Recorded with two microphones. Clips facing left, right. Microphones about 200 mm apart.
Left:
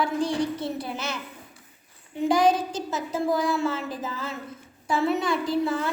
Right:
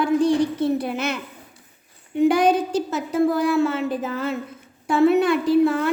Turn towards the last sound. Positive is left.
turn(degrees=-60)  # may be behind; listen again after turning